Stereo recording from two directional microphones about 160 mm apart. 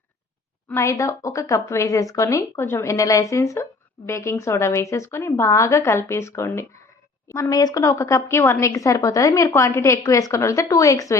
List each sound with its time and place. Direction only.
0.7 s a woman's voice: 20° left (ahead or behind)